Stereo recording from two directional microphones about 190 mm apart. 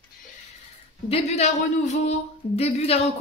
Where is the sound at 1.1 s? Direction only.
35° left (ahead or behind).